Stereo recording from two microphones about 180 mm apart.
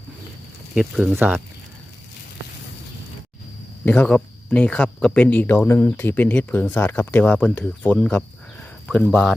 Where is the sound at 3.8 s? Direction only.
10° left (ahead or behind).